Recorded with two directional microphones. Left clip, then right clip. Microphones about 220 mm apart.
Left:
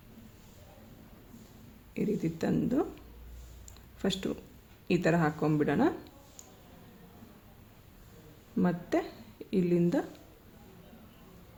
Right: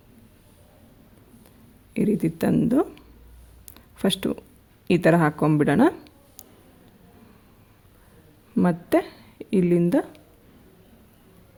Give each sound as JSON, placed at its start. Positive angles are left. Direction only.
{"t": 1.9, "sound": "speech", "side_deg": -50}
{"t": 3.8, "sound": "a sound", "side_deg": -45}
{"t": 4.9, "sound": "speech", "side_deg": -50}
{"t": 8.5, "sound": "speech", "side_deg": -45}